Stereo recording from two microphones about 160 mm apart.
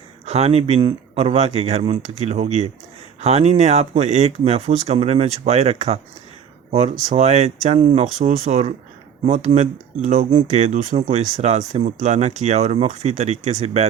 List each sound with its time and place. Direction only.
0.3 s speech: 40° right (ahead or behind)